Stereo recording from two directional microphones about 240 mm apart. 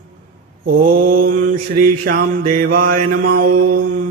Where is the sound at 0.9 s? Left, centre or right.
Right.